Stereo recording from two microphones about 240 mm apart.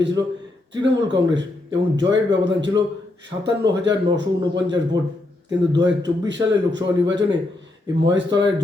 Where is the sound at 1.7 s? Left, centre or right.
Centre.